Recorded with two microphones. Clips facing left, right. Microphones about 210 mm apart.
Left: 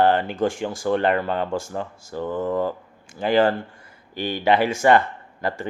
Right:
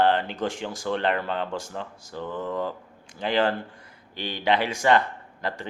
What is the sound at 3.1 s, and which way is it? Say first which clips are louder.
Speech: left 5 dB; 5° left (ahead or behind).